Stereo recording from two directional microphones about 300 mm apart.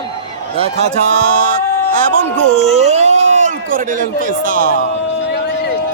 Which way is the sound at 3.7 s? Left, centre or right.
Right.